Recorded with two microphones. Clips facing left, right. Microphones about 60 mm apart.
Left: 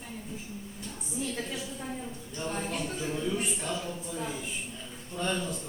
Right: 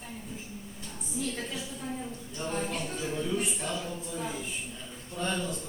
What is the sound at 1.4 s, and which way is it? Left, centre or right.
Speech, centre.